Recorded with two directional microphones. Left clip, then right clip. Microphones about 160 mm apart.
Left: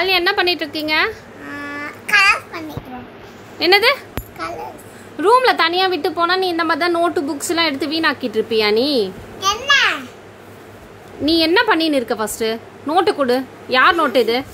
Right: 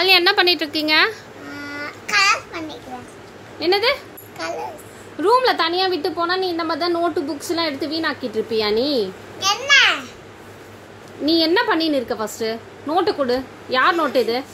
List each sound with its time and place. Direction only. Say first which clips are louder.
0.0 s a woman's voice: right 1 dB; centre (ahead or behind)
1.6 s child singing: left 2 dB; 10° left (ahead or behind)
3.5 s a child's voice: left 5 dB; 5° left (ahead or behind)
11.2 s a woman's voice: left 3 dB; 5° left (ahead or behind)